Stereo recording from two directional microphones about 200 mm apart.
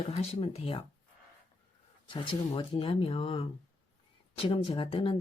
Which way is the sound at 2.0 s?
25° left (ahead or behind).